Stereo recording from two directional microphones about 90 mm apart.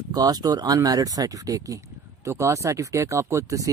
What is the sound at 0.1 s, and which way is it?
Speech, 45° right (ahead or behind).